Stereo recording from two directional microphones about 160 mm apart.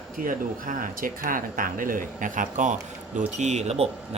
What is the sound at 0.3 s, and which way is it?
A man's voice, 60° right (ahead or behind).